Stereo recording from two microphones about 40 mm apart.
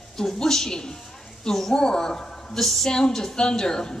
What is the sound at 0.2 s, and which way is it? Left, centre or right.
A man's voice, centre.